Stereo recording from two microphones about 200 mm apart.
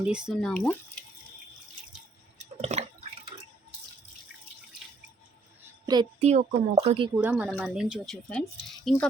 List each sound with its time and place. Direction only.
0.0 s speech: 5° right (ahead or behind)
2.6 s drip: 35° right (ahead or behind)
5.8 s a sound: 20° right (ahead or behind)
6.1 s speech: 35° right (ahead or behind)
7.2 s speech: 5° right (ahead or behind)